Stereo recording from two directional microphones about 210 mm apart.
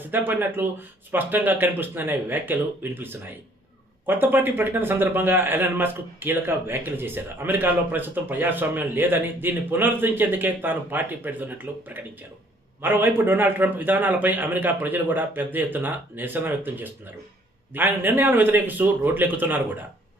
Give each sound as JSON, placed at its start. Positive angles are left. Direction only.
{"t": 0.0, "sound": "a man's voice", "side_deg": -10}